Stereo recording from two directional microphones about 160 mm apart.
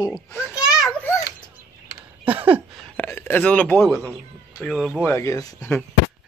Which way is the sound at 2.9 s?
15° left (ahead or behind).